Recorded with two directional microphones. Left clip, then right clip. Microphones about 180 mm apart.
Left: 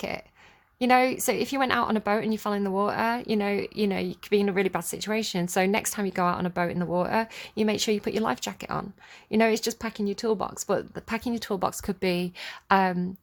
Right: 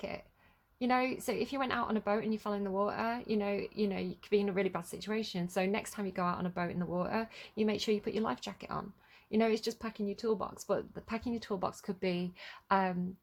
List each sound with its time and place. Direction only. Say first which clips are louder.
0.8 s a woman's voice: left 11 dB; 40° left (ahead or behind)